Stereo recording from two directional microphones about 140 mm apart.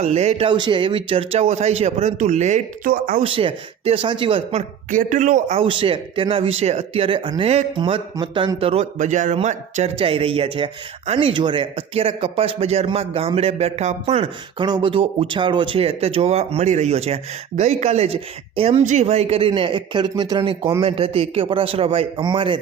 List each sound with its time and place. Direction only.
0.0 s a man's voice: 50° right (ahead or behind)
2.8 s speech: 80° right
3.2 s speech: 40° right (ahead or behind)
4.9 s a man's voice: 70° right (ahead or behind)
5.5 s a man's voice: 40° right (ahead or behind)
14.6 s a man's voice: 35° right (ahead or behind)